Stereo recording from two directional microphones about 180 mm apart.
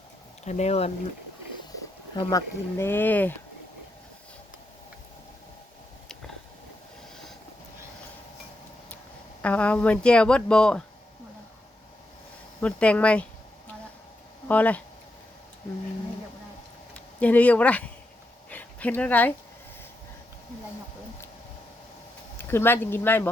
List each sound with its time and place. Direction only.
0.4 s speech: 40° left (ahead or behind)
2.1 s speech: 15° left (ahead or behind)
9.4 s speech: 5° left (ahead or behind)
12.5 s speech: 5° left (ahead or behind)
14.4 s speech: 10° left (ahead or behind)
17.2 s speech: 10° left (ahead or behind)
18.5 s a sound: 10° left (ahead or behind)
22.4 s speech: 15° left (ahead or behind)